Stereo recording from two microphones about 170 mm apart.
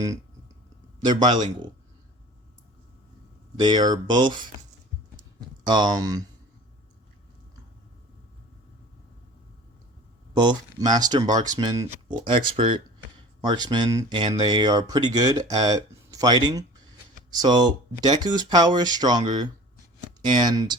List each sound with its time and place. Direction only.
1.0 s speech: 25° right (ahead or behind)
3.6 s speech: 25° right (ahead or behind)
5.6 s speech: 25° right (ahead or behind)
10.3 s speech: 25° right (ahead or behind)